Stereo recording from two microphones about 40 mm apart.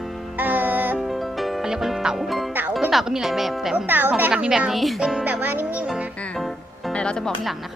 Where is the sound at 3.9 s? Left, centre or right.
Right.